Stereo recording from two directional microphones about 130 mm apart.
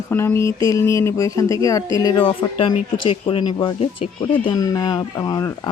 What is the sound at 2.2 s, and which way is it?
Speech, 40° left (ahead or behind).